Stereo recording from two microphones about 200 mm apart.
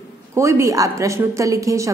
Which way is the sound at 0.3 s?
15° right (ahead or behind).